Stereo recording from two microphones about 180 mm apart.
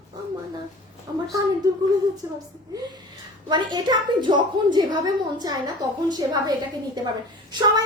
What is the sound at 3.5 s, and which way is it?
A woman's voice, 25° right (ahead or behind).